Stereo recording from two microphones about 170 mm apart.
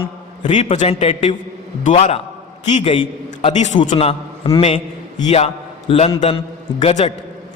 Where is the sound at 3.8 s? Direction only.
30° left (ahead or behind).